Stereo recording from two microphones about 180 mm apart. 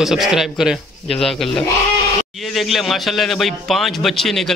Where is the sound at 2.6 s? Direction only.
Centre (ahead or behind).